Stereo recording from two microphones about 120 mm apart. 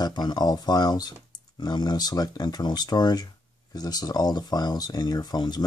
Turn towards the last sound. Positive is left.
turn(degrees=35)  # may be behind; listen again after turning